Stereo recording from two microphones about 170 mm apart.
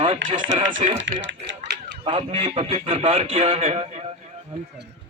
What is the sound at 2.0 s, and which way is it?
A man's voice, 30° right (ahead or behind).